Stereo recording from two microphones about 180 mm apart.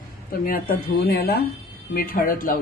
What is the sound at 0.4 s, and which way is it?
Speech, 55° left (ahead or behind).